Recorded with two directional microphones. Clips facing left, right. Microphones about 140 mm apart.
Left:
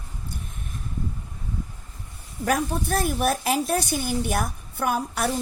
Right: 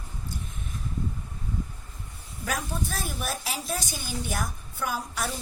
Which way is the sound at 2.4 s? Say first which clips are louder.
Left 7 dB; 60° left (ahead or behind).